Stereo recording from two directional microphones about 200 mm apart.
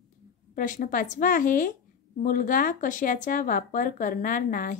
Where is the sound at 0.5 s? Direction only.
40° left (ahead or behind).